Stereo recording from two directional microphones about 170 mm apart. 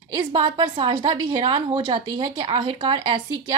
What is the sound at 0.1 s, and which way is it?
A woman's voice, 25° right (ahead or behind).